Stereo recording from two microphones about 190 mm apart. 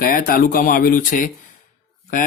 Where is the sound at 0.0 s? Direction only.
50° left (ahead or behind).